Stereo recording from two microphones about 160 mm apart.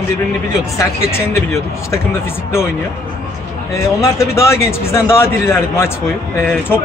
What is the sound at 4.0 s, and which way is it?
A man's voice, 20° left (ahead or behind).